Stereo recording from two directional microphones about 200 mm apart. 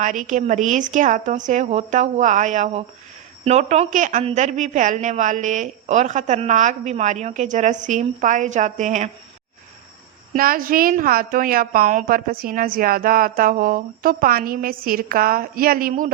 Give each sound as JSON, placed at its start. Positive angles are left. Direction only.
{"t": 0.0, "sound": "speech", "side_deg": -40}
{"t": 10.3, "sound": "a woman's voice", "side_deg": -45}